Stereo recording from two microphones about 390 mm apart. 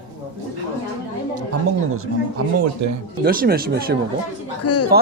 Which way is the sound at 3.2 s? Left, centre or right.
Right.